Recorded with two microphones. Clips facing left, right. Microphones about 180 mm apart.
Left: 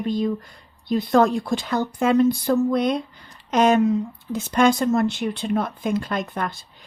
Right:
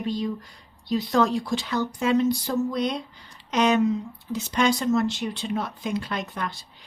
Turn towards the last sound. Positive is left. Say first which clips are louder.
# left 4 dB
turn(degrees=50)  # may be behind; listen again after turning